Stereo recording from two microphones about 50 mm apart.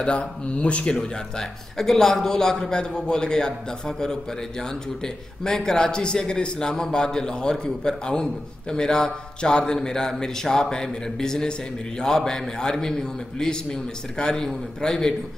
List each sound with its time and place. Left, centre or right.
0.0 s a man's voice: left